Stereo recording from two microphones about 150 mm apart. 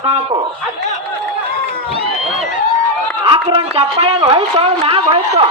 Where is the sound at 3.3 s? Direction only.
35° right (ahead or behind).